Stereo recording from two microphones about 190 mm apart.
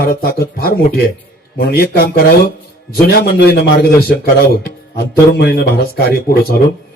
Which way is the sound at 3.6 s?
55° left (ahead or behind).